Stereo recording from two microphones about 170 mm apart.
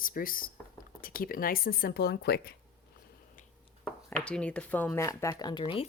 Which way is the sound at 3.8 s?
5° left (ahead or behind).